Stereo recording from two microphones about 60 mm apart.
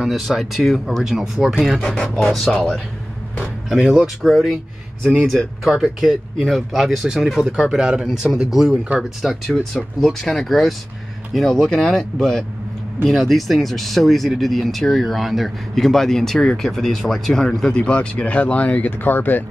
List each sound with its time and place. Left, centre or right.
0.0 s speech: centre
2.3 s speech: centre
3.6 s speech: centre
17.6 s speech: centre